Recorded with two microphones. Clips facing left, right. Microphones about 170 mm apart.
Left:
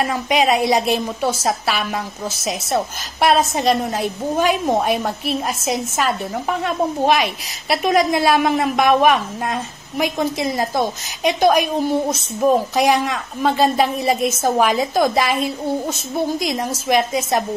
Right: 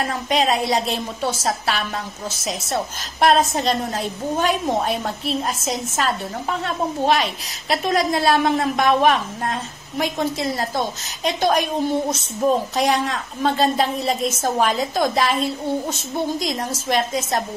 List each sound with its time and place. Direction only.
0.0 s a woman's voice: 10° left (ahead or behind)
12.7 s a woman's voice: 10° left (ahead or behind)